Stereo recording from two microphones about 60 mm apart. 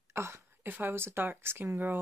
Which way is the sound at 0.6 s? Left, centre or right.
Right.